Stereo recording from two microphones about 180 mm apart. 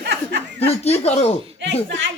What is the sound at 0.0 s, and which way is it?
Chuckle, 65° right (ahead or behind).